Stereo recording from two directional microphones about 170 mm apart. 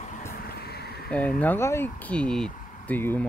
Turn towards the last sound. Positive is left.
turn(degrees=10)  # may be behind; listen again after turning